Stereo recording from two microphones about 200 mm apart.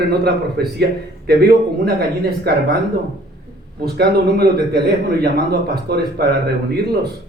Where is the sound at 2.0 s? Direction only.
50° right (ahead or behind).